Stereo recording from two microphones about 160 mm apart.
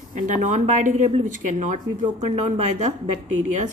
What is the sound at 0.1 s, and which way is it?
Speech, 50° right (ahead or behind).